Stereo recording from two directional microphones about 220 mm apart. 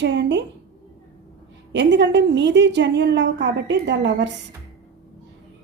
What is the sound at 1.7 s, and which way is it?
A woman's voice, 55° right (ahead or behind).